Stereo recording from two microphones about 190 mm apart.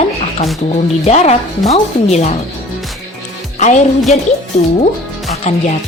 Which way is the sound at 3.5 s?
40° left (ahead or behind).